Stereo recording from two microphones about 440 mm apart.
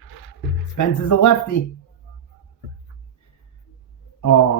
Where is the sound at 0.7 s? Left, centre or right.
Left.